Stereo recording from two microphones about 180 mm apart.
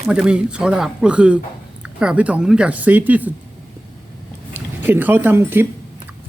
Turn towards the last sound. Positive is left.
turn(degrees=-10)  # may be behind; listen again after turning